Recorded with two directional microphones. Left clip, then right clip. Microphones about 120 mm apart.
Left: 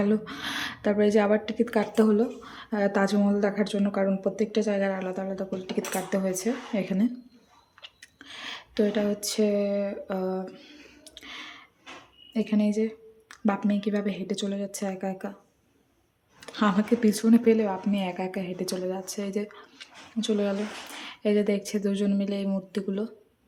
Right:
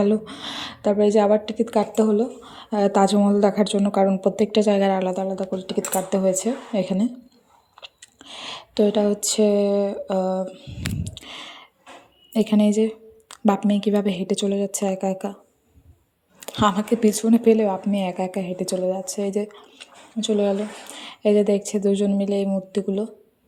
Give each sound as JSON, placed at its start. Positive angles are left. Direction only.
{"t": 0.0, "sound": "a woman's voice", "side_deg": -20}
{"t": 2.0, "sound": "a woman's voice", "side_deg": -10}
{"t": 2.6, "sound": "a woman's voice", "side_deg": -30}
{"t": 5.2, "sound": "a woman's voice", "side_deg": -30}
{"t": 10.5, "sound": "a woman's voice", "side_deg": -15}
{"t": 11.0, "sound": "a sound", "side_deg": -35}
{"t": 12.3, "sound": "a woman's voice", "side_deg": -55}
{"t": 16.4, "sound": "a woman's voice", "side_deg": -45}